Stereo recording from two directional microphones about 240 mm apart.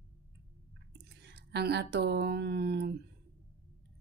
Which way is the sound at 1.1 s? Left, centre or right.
Right.